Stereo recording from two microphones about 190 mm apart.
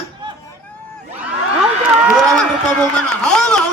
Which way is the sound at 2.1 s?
Centre (ahead or behind).